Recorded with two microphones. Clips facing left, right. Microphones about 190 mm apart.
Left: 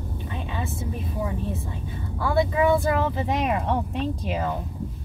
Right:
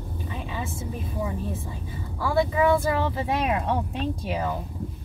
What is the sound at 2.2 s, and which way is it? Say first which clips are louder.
Speech: left 1 dB; centre (ahead or behind).